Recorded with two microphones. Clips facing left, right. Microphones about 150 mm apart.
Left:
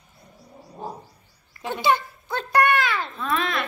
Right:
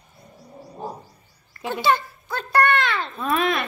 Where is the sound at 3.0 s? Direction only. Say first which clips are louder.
Right 4 dB; 20° right (ahead or behind).